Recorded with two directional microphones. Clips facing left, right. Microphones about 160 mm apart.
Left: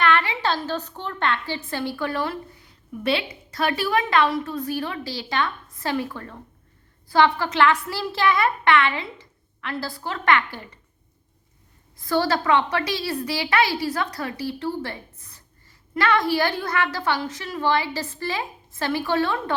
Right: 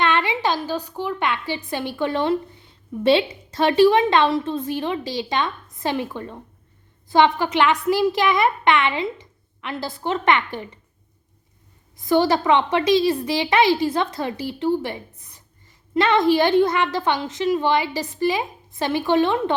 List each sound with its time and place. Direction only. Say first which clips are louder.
0.0 s a woman's voice: right 1 dB; 20° right (ahead or behind)
11.9 s a woman's voice: right 4 dB; 20° right (ahead or behind)